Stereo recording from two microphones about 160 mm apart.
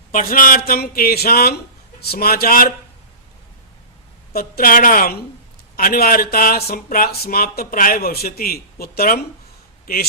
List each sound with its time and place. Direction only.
0.1 s speech: 60° left (ahead or behind)
4.3 s a man's voice: 65° left (ahead or behind)